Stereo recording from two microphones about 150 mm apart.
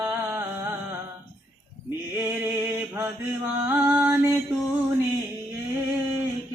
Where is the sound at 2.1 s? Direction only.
15° right (ahead or behind).